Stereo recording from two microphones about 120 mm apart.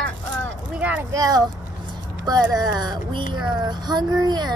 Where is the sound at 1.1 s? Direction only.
30° right (ahead or behind).